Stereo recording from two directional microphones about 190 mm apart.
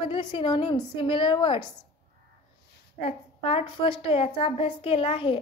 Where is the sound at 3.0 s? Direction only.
30° left (ahead or behind).